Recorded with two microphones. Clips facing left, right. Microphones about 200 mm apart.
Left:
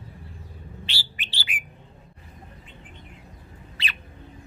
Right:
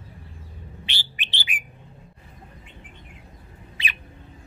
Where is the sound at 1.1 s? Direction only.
20° right (ahead or behind).